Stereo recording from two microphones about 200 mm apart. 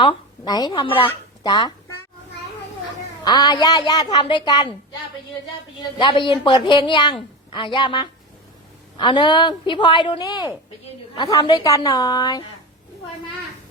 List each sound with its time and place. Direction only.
0.0 s speech: 20° left (ahead or behind)
3.2 s speech: 20° left (ahead or behind)
6.0 s speech: 25° left (ahead or behind)